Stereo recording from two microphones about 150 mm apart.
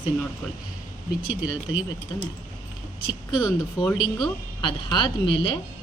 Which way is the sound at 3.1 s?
30° left (ahead or behind).